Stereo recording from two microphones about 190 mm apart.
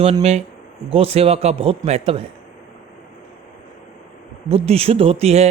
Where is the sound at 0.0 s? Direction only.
35° right (ahead or behind).